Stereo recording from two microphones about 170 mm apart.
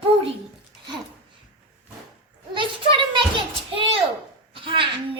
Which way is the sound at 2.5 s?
30° right (ahead or behind).